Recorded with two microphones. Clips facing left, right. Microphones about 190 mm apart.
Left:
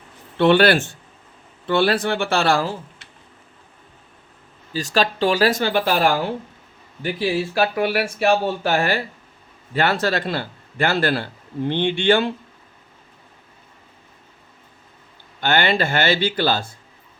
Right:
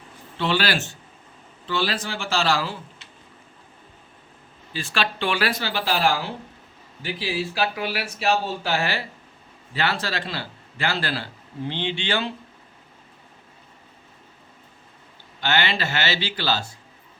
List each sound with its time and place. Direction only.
0.3 s speech: 60° left (ahead or behind)
4.7 s a man's voice: 40° left (ahead or behind)
15.4 s a man's voice: 50° left (ahead or behind)